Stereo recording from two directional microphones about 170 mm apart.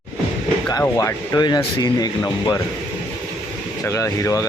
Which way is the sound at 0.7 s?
20° left (ahead or behind).